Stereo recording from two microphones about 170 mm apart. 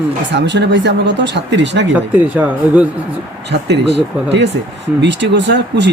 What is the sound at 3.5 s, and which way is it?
Speech, 90° right.